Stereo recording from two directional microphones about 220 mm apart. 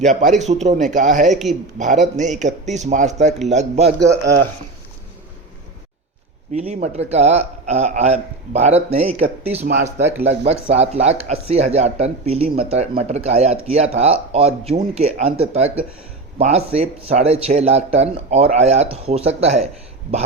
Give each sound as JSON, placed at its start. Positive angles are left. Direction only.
{"t": 0.0, "sound": "speech", "side_deg": -35}
{"t": 4.1, "sound": "speech", "side_deg": -15}
{"t": 6.5, "sound": "speech", "side_deg": -30}
{"t": 10.0, "sound": "speech", "side_deg": -10}
{"t": 10.2, "sound": "speech", "side_deg": -30}